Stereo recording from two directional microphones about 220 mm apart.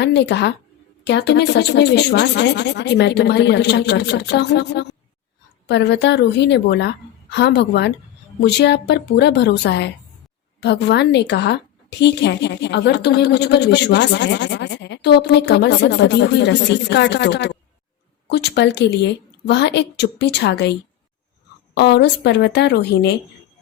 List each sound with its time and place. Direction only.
0.0 s a woman's voice: 50° left (ahead or behind)
21.8 s a woman's voice: 50° left (ahead or behind)